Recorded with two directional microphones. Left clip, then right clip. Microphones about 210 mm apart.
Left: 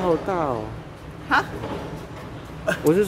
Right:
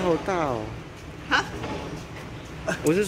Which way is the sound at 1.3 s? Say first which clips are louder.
Left 3 dB; 55° left (ahead or behind).